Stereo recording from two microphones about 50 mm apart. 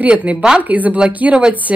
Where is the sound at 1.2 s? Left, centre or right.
Right.